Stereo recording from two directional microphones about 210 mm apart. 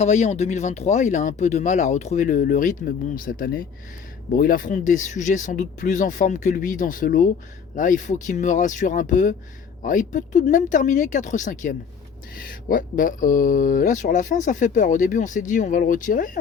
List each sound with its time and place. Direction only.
0.0 s speech: 30° left (ahead or behind)